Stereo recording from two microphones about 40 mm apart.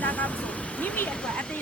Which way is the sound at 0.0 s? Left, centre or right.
Left.